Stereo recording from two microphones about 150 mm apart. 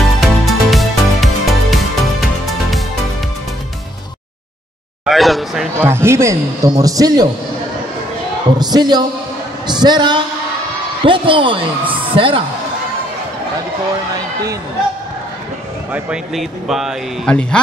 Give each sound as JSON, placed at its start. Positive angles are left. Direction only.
{"t": 0.0, "sound": "music", "side_deg": 0}
{"t": 5.0, "sound": "speech", "side_deg": 0}
{"t": 5.8, "sound": "a man's voice", "side_deg": -15}
{"t": 8.5, "sound": "a man's voice", "side_deg": -25}
{"t": 15.9, "sound": "speech", "side_deg": -5}